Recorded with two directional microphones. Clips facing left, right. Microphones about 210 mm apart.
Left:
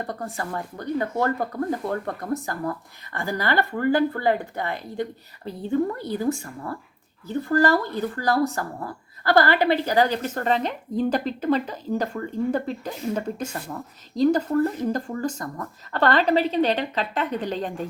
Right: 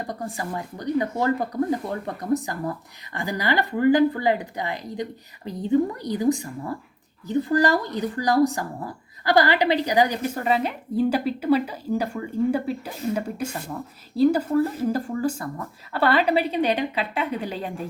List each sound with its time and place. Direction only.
0.1 s speech: 15° right (ahead or behind)